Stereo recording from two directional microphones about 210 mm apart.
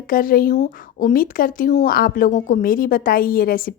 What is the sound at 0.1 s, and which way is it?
Speech, 40° left (ahead or behind).